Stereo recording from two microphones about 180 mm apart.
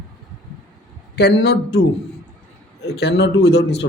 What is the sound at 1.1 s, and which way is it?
Speech, 65° left (ahead or behind).